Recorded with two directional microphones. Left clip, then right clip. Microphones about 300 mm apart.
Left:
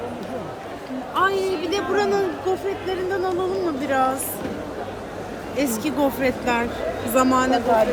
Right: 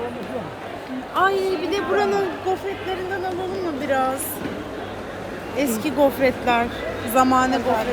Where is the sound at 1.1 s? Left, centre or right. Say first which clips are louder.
Right 1 dB; centre.